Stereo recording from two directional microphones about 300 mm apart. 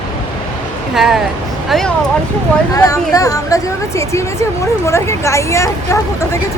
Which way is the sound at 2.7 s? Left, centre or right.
Centre.